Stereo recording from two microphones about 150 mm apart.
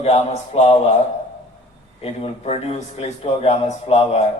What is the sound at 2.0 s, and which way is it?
A man's voice, 40° left (ahead or behind).